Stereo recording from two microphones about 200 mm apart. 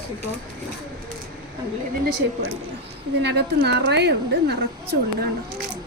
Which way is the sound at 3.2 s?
55° right (ahead or behind).